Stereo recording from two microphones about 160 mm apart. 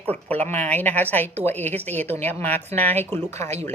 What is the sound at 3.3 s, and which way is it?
Speech, 45° right (ahead or behind).